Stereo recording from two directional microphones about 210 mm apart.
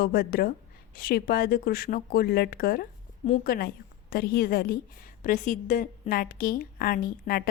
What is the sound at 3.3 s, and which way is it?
Speech, 35° left (ahead or behind).